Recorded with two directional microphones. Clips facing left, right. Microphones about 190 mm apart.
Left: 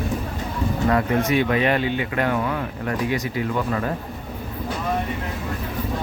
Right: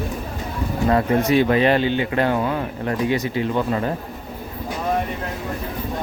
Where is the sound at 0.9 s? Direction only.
30° right (ahead or behind).